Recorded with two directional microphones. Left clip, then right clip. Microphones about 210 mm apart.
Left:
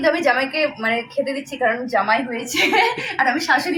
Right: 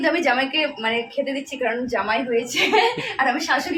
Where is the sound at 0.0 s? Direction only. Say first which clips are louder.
Left 2 dB; 10° right (ahead or behind).